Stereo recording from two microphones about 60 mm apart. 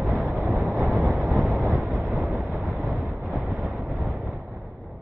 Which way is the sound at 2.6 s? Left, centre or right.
Centre.